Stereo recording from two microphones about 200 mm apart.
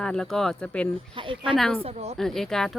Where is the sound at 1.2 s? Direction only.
25° right (ahead or behind).